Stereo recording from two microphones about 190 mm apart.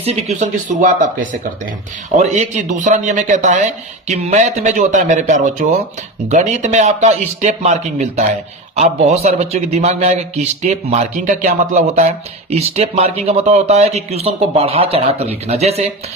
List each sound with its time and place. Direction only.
0.0 s a man's voice: 35° right (ahead or behind)
2.1 s a man's voice: 35° right (ahead or behind)